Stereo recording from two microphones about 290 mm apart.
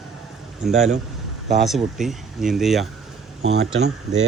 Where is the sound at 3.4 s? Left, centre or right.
Right.